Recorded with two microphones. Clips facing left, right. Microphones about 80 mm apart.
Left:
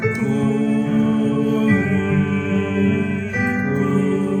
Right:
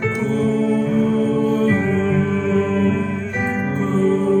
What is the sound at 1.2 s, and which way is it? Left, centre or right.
Music, right.